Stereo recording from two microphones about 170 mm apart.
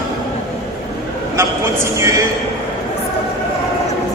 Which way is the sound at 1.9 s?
20° right (ahead or behind).